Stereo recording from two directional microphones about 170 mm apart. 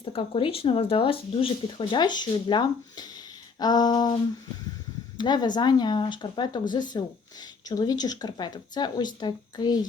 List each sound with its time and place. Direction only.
0.0 s speech: 30° left (ahead or behind)